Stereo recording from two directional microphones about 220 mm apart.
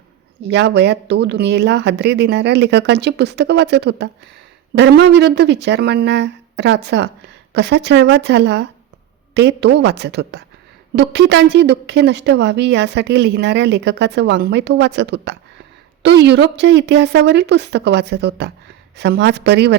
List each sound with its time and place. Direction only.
0.4 s a woman's voice: 50° right (ahead or behind)